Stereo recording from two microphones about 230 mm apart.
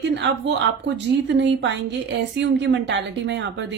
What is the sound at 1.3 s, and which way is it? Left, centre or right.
A woman's voice, right.